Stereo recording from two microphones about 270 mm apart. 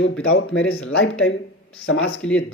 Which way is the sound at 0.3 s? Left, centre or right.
Left.